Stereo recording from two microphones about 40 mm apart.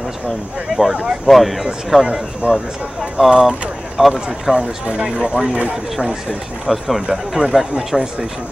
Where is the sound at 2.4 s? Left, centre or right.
Right.